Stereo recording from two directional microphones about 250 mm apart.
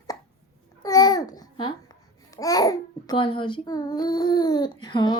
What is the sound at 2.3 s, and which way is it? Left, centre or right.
A child's voice, centre.